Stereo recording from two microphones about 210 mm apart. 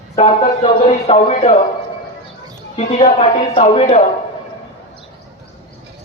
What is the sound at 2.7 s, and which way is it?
Speech, 30° left (ahead or behind).